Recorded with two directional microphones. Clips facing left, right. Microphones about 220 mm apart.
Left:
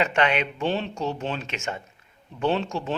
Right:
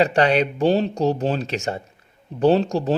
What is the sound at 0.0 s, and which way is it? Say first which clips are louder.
Speech: right 6 dB; 35° right (ahead or behind).